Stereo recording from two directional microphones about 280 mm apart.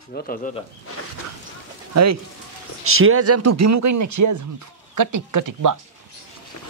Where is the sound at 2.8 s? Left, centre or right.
Right.